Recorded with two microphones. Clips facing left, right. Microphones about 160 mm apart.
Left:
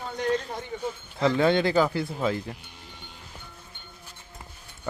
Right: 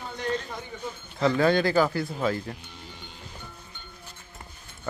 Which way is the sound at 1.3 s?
20° left (ahead or behind).